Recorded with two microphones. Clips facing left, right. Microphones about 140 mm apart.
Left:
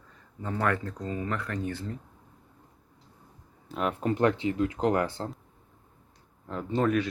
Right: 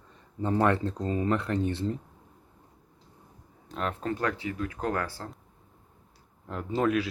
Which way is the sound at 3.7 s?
10° left (ahead or behind).